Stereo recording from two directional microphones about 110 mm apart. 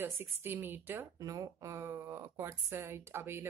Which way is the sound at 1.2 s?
30° right (ahead or behind).